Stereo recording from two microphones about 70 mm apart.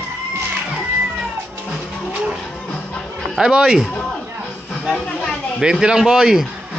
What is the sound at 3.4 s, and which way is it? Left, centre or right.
Speech, centre.